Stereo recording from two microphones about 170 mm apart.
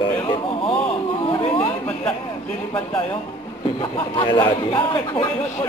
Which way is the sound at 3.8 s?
30° left (ahead or behind).